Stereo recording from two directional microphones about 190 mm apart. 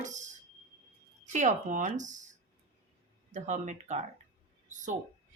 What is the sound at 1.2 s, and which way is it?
Speech, 40° right (ahead or behind).